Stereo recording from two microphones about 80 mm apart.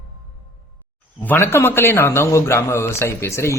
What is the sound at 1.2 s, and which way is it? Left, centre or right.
A man's voice, left.